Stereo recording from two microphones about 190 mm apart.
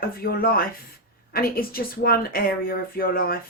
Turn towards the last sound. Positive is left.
turn(degrees=50)  # may be behind; listen again after turning